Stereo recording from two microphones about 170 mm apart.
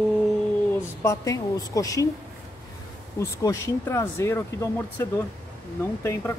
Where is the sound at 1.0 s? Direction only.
20° left (ahead or behind).